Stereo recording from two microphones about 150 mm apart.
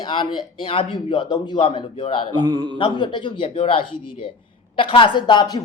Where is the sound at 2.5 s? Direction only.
30° right (ahead or behind).